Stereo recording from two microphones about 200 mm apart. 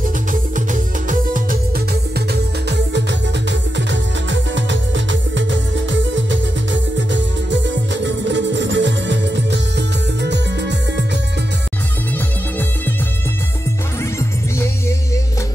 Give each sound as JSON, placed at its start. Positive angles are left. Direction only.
{"t": 1.0, "sound": "music", "side_deg": -40}
{"t": 2.7, "sound": "music", "side_deg": -60}